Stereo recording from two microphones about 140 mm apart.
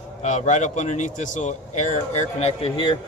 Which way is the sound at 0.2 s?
60° left (ahead or behind).